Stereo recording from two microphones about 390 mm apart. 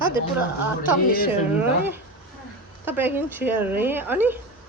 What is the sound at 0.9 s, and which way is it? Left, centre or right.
Speech, left.